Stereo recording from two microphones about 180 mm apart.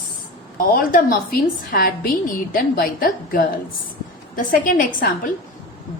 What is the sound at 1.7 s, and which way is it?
A woman's voice, 50° left (ahead or behind).